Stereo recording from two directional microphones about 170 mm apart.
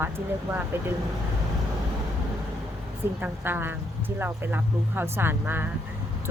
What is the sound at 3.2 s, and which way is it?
Speech, 10° right (ahead or behind).